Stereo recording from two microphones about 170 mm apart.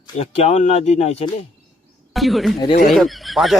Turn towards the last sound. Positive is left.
turn(degrees=0)  # may be behind; listen again after turning